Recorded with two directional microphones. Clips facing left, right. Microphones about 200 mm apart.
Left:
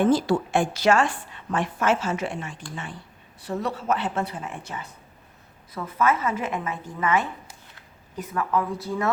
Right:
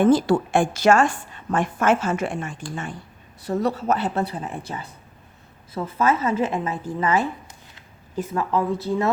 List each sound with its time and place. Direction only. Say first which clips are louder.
0.0 s a woman's voice: right 3 dB; 50° right (ahead or behind); by 9.0 s 25° right (ahead or behind)